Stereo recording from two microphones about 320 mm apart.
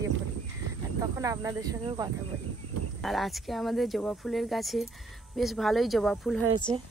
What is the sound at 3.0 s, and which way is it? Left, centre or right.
Speech, centre.